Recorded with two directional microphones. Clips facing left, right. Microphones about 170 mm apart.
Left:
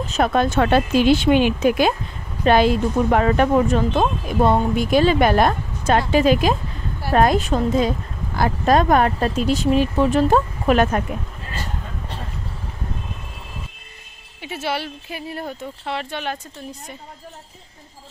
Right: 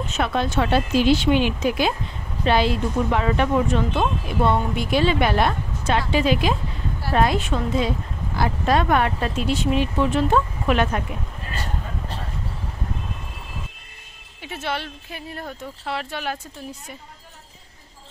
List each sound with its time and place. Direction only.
0.0 s speech: 35° left (ahead or behind)
0.3 s speech: 50° left (ahead or behind)
14.4 s speech: 5° left (ahead or behind)